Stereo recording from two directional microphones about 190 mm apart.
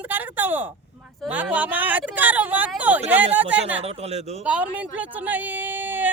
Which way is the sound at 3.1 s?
10° right (ahead or behind).